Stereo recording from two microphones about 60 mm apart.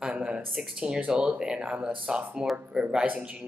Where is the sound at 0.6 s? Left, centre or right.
Centre.